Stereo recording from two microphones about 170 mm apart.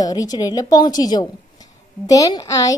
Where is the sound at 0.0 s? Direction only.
20° left (ahead or behind).